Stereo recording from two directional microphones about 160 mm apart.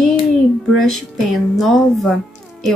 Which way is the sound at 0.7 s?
Centre (ahead or behind).